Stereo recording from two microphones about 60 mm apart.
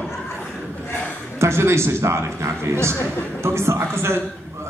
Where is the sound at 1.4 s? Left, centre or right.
Right.